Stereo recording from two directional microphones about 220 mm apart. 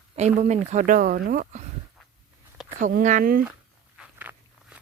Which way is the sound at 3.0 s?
35° right (ahead or behind).